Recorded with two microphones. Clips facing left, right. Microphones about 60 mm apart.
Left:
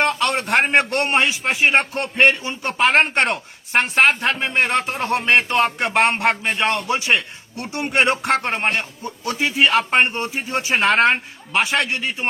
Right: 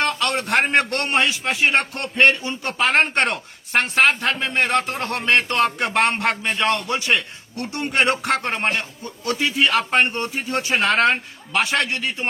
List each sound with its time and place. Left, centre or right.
0.0 s a man's voice: left
2.8 s speech: centre
3.7 s a man's voice: centre
8.4 s speech: centre
9.2 s a man's voice: left